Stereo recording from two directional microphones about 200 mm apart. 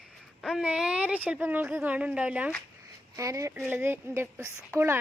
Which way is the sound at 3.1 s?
15° right (ahead or behind).